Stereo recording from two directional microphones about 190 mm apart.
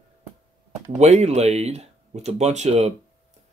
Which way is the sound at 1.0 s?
35° right (ahead or behind).